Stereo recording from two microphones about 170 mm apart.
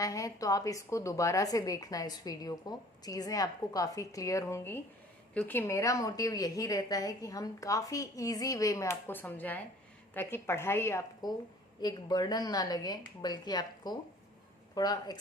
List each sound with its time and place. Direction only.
0.0 s a woman's voice: 20° left (ahead or behind)